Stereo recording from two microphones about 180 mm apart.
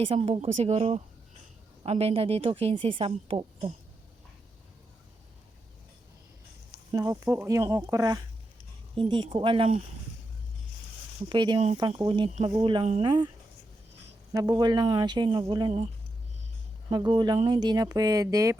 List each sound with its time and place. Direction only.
0.0 s a woman's voice: 35° right (ahead or behind)
6.9 s speech: 20° right (ahead or behind)
11.3 s speech: 25° right (ahead or behind)
14.3 s speech: 20° right (ahead or behind)
16.9 s speech: 25° right (ahead or behind)